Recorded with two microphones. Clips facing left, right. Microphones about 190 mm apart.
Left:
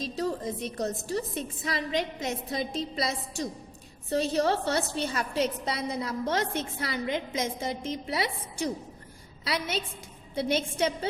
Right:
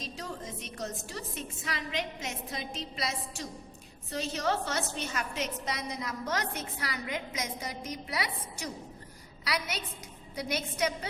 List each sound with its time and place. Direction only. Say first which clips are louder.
0.0 s a woman's voice: left 9 dB; 35° left (ahead or behind)